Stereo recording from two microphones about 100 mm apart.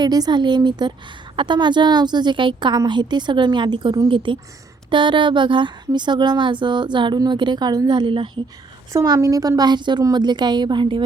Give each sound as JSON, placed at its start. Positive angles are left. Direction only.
{"t": 0.0, "sound": "a woman's voice", "side_deg": -45}
{"t": 8.9, "sound": "a woman's voice", "side_deg": -35}